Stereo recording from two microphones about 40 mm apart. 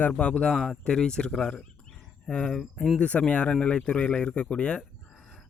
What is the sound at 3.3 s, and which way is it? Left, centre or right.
Speech, left.